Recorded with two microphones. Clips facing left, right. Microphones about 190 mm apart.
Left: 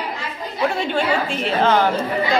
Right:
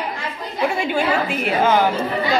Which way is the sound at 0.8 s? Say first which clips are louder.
Right 1 dB; 10° right (ahead or behind).